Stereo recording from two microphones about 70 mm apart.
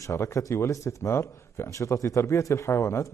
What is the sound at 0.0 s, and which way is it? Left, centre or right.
A man's voice, left.